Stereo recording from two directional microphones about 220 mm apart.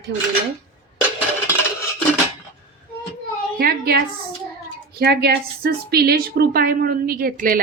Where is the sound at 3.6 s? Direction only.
45° right (ahead or behind).